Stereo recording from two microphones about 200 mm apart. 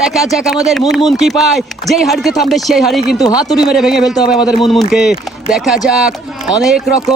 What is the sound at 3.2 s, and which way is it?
Speech, 20° left (ahead or behind).